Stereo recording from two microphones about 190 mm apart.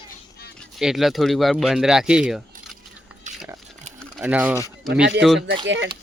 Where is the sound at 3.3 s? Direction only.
40° right (ahead or behind).